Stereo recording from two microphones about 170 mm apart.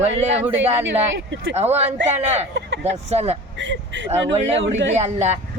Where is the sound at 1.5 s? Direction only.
40° right (ahead or behind).